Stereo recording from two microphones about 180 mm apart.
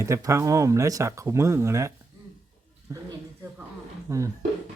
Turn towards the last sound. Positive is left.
turn(degrees=-15)  # may be behind; listen again after turning